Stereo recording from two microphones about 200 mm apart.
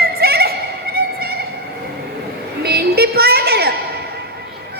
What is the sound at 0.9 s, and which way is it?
Music, 50° right (ahead or behind).